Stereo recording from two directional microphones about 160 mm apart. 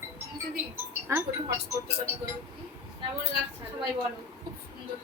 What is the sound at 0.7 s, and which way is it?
Music, 15° right (ahead or behind).